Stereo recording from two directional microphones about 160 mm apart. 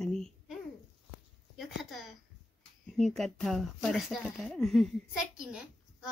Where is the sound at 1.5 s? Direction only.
Centre (ahead or behind).